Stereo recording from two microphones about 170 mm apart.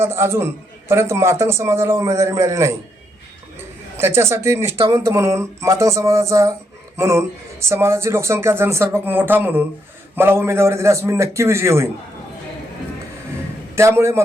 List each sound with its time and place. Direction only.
0.0 s a man's voice: 15° right (ahead or behind)
3.9 s a man's voice: 15° right (ahead or behind)
13.7 s a man's voice: 15° right (ahead or behind)